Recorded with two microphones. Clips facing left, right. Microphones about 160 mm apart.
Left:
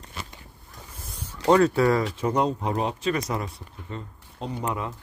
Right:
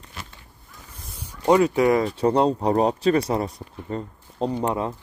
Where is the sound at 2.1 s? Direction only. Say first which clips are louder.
Right 5 dB; 35° right (ahead or behind).